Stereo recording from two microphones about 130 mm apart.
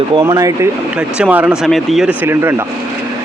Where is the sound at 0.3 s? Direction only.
25° right (ahead or behind).